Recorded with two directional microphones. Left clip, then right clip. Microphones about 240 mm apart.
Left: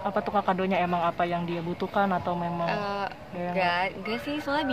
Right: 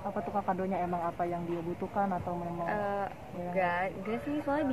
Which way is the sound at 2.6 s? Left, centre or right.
Centre.